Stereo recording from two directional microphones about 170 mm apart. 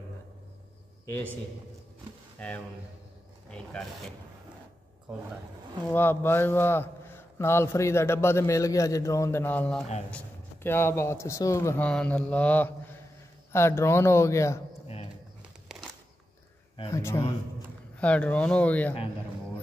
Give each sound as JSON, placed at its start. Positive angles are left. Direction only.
{"t": 2.3, "sound": "speech", "side_deg": 10}
{"t": 5.9, "sound": "a man's voice", "side_deg": 10}
{"t": 16.9, "sound": "a man's voice", "side_deg": 15}